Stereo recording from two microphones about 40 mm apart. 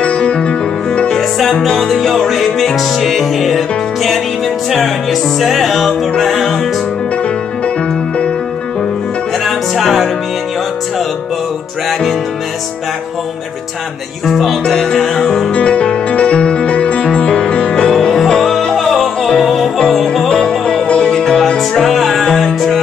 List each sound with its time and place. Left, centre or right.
0.0 s music: left
1.4 s music: centre
9.4 s music: centre
14.2 s music: centre
15.5 s music: left; by 19.4 s centre
19.4 s music: centre
20.2 s music: left
21.2 s music: centre